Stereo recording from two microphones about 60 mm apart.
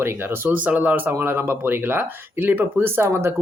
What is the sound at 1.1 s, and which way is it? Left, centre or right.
Speech, right.